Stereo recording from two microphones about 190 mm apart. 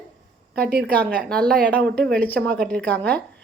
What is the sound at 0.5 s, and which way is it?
Speech, 60° right (ahead or behind).